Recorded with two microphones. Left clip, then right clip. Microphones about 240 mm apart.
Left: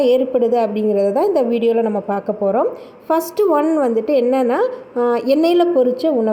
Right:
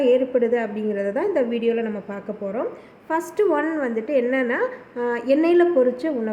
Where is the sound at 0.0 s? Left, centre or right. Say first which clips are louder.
Left 4 dB; centre.